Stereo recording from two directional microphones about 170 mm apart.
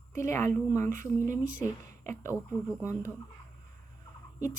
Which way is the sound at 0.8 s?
50° right (ahead or behind).